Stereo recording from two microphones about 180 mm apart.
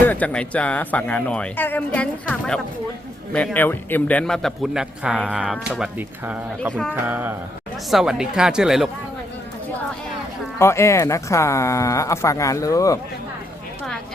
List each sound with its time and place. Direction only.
0.0 s a man's voice: 10° left (ahead or behind); by 6.4 s 10° right (ahead or behind)
6.9 s a sound: 10° right (ahead or behind)
7.9 s a man's voice: centre (ahead or behind)
10.6 s speech: 15° left (ahead or behind)